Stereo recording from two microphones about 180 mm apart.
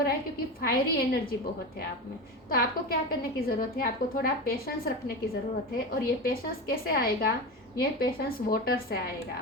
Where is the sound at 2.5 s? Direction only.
55° left (ahead or behind).